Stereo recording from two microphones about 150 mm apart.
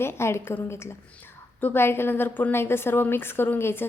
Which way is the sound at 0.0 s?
15° left (ahead or behind).